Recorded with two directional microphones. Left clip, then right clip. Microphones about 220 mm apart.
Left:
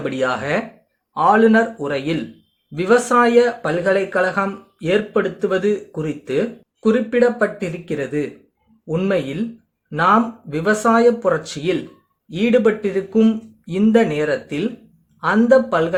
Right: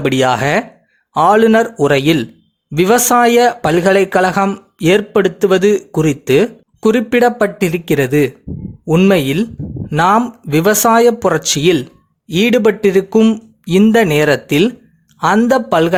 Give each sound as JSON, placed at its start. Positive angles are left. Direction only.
{"t": 0.0, "sound": "speech", "side_deg": -45}